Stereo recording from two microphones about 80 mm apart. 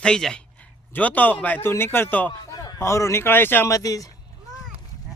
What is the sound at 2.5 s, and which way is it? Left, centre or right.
Speech, left.